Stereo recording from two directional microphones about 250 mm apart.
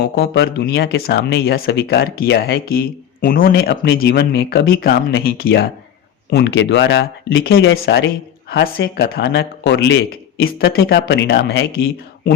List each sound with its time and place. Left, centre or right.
0.0 s speech: left